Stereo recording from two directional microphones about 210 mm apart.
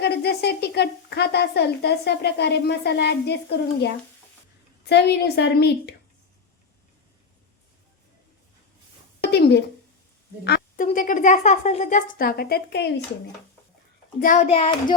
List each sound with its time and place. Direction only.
0.0 s speech: 50° left (ahead or behind)
4.9 s speech: 50° left (ahead or behind)
9.2 s a woman's voice: 50° left (ahead or behind)
10.4 s a sound: 50° left (ahead or behind)
10.8 s speech: 40° left (ahead or behind)
14.2 s a child's voice: 35° left (ahead or behind)